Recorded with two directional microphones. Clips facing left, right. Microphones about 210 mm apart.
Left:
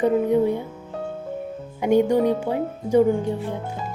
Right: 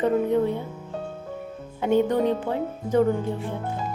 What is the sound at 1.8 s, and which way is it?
Speech, 10° left (ahead or behind).